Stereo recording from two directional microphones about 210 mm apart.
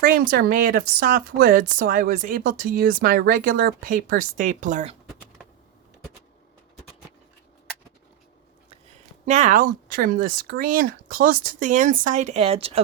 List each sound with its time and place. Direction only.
0.0 s a woman's voice: 45° right (ahead or behind)
9.2 s speech: 35° right (ahead or behind)